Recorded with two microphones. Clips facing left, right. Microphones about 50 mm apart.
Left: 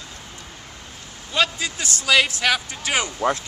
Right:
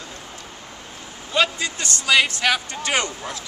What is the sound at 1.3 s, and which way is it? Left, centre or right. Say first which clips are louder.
A man's voice: right 1 dB; centre.